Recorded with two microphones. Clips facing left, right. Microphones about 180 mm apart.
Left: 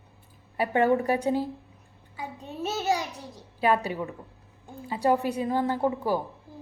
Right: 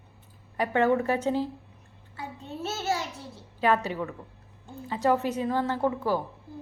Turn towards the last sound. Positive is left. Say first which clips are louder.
# even
turn(degrees=15)  # may be behind; listen again after turning